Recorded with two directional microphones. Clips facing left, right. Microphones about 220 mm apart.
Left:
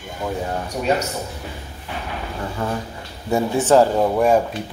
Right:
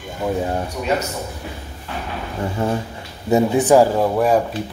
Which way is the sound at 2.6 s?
25° right (ahead or behind).